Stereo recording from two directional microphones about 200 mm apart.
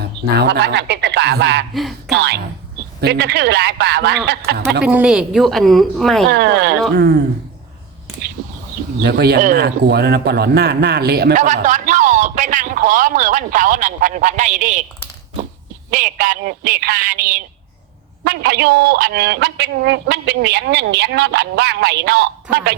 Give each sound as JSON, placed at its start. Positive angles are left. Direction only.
{"t": 0.3, "sound": "speech", "side_deg": -55}
{"t": 1.7, "sound": "speech", "side_deg": 0}
{"t": 2.0, "sound": "a man's voice", "side_deg": -55}
{"t": 4.8, "sound": "speech", "side_deg": -5}
{"t": 6.2, "sound": "a man's voice", "side_deg": -55}
{"t": 8.4, "sound": "a sound", "side_deg": -45}
{"t": 9.0, "sound": "a man's voice", "side_deg": -50}
{"t": 15.9, "sound": "a man's voice", "side_deg": -40}